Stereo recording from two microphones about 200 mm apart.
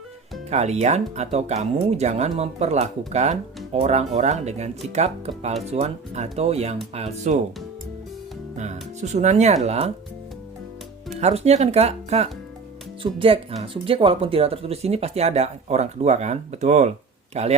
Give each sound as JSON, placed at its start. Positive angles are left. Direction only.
{"t": 0.5, "sound": "speech", "side_deg": -35}
{"t": 8.5, "sound": "speech", "side_deg": -35}
{"t": 11.1, "sound": "speech", "side_deg": -35}